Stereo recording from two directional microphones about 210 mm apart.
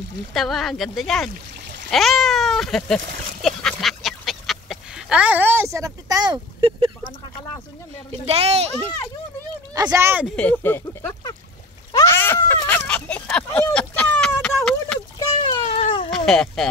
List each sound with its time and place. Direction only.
0.3 s speech: centre (ahead or behind)
3.4 s duck: centre (ahead or behind); by 6.9 s 25° right (ahead or behind)
8.3 s speech: 30° right (ahead or behind)
9.8 s speech: 15° right (ahead or behind)
10.3 s speech: 5° left (ahead or behind)
12.0 s a sound: 10° left (ahead or behind)
15.4 s a sound: 30° left (ahead or behind)
16.3 s speech: centre (ahead or behind)